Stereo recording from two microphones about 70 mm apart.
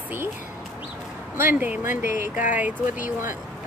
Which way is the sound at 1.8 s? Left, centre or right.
Right.